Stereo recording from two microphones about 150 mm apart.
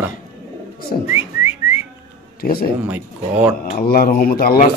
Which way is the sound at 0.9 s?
60° left (ahead or behind).